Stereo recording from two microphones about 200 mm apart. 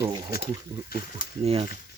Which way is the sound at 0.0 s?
20° right (ahead or behind).